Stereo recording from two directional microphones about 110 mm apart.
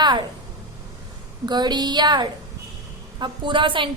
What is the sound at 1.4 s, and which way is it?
Speech, 40° right (ahead or behind).